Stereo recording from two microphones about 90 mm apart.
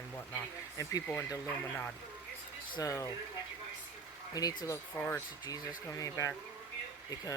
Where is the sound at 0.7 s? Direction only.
35° left (ahead or behind).